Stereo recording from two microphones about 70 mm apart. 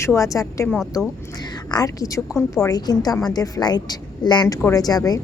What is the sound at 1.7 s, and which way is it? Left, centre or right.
A woman's voice, left.